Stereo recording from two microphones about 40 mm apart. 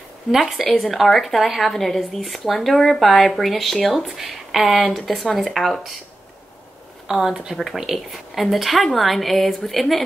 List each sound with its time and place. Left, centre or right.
0.3 s speech: centre
0.7 s a woman's voice: centre
1.7 s a woman's voice: centre
3.9 s a woman's voice: centre
7.1 s speech: centre
7.5 s a woman's voice: centre